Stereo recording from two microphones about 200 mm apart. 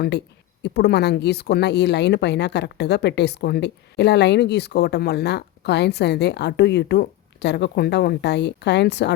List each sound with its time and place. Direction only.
0.6 s speech: 55° left (ahead or behind)